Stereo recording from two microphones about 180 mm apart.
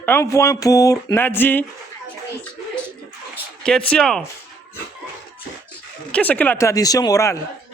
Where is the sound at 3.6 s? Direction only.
5° left (ahead or behind).